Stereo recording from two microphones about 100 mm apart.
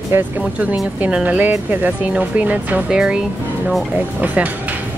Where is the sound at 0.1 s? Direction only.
25° right (ahead or behind).